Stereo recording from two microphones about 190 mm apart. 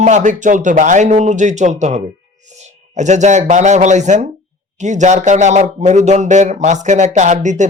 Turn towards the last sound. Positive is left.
turn(degrees=-40)  # may be behind; listen again after turning